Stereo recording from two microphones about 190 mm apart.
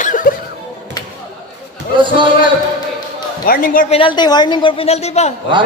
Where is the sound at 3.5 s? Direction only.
45° left (ahead or behind).